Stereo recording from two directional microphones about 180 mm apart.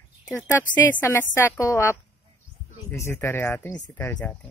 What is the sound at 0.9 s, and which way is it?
Speech, 10° left (ahead or behind).